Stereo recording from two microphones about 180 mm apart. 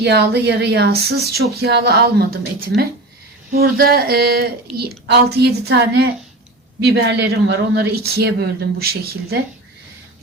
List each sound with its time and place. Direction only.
0.0 s speech: 70° right (ahead or behind)